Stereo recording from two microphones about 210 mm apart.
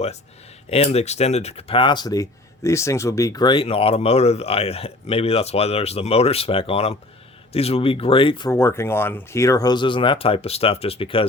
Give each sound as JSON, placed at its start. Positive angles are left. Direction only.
{"t": 0.7, "sound": "speech", "side_deg": 30}
{"t": 8.4, "sound": "speech", "side_deg": 10}